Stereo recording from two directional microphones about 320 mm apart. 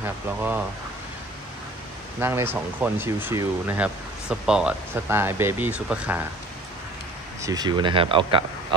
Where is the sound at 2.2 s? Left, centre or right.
Centre.